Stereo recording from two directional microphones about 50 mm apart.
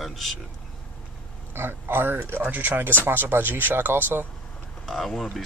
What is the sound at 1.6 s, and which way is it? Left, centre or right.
Speech, right.